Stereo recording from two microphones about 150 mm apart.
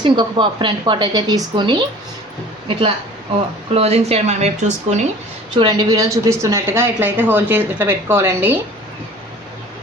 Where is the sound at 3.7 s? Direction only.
40° right (ahead or behind).